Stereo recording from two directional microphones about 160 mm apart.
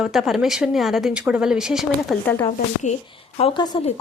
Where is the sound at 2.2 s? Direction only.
15° left (ahead or behind).